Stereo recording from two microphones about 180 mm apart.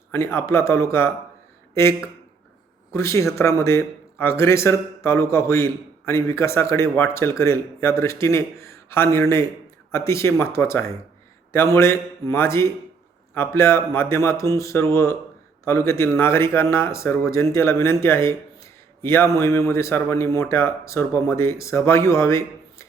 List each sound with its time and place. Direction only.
0.1 s speech: 15° left (ahead or behind)